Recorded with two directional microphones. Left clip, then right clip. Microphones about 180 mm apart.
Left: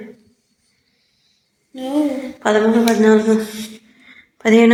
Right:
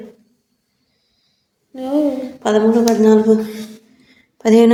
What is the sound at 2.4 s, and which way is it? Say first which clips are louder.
Speech: even; 5° right (ahead or behind).